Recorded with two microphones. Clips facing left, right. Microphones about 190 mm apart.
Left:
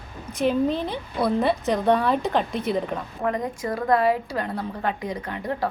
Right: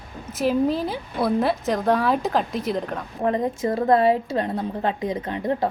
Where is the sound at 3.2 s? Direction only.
25° right (ahead or behind).